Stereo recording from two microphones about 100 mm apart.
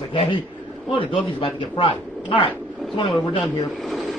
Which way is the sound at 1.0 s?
60° left (ahead or behind).